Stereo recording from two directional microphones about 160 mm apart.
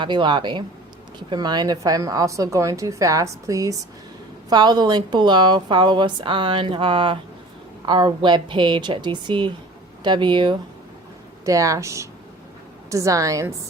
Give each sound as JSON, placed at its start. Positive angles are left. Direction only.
{"t": 0.0, "sound": "a woman's voice", "side_deg": -30}